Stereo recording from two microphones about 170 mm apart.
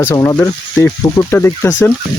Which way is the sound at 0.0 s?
20° left (ahead or behind).